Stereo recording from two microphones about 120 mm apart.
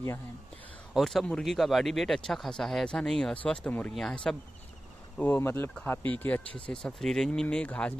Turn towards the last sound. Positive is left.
turn(degrees=10)  # may be behind; listen again after turning